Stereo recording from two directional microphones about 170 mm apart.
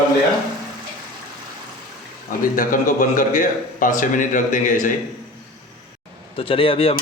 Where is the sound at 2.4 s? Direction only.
55° left (ahead or behind).